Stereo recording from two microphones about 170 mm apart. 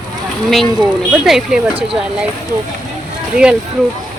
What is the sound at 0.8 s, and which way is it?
Speech, 5° right (ahead or behind).